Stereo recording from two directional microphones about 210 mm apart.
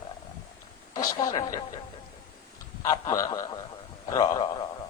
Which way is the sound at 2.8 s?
15° left (ahead or behind).